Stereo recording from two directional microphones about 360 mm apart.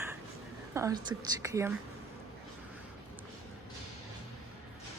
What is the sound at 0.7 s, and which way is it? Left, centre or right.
Speech, centre.